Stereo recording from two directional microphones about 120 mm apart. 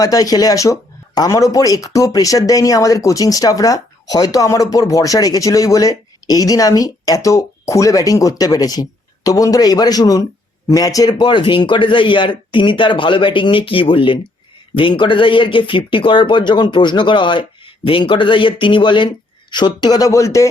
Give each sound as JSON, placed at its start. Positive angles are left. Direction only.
{"t": 0.0, "sound": "speech", "side_deg": 30}